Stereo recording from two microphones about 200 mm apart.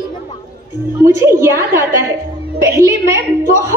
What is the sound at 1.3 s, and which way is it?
Speech, 15° right (ahead or behind).